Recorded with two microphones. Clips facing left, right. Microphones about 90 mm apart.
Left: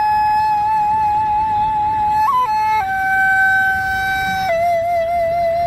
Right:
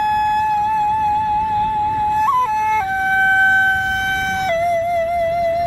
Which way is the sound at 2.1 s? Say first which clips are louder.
Left 1 dB; 5° left (ahead or behind).